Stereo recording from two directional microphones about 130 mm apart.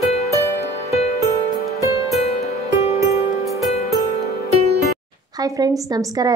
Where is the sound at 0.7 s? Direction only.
55° left (ahead or behind).